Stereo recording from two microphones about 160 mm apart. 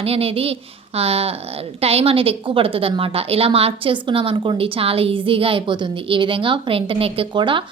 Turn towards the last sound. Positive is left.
turn(degrees=-30)  # may be behind; listen again after turning